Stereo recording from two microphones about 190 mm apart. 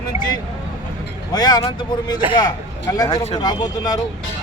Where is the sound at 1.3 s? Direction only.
20° left (ahead or behind).